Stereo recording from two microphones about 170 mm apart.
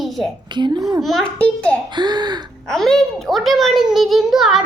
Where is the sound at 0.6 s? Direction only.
25° right (ahead or behind).